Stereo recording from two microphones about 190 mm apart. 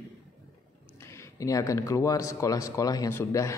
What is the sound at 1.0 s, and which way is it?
Speech, 15° left (ahead or behind).